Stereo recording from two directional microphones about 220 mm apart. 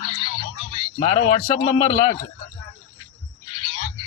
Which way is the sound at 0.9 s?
25° left (ahead or behind).